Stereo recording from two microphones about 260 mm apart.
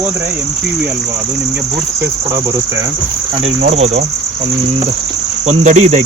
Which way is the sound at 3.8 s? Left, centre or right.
Right.